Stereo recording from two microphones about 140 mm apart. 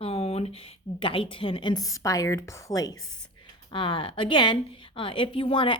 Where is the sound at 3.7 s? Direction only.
35° left (ahead or behind).